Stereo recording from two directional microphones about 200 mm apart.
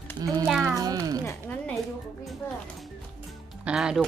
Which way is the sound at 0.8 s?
20° right (ahead or behind).